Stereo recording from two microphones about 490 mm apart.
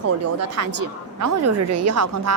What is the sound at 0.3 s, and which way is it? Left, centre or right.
A woman's voice, right.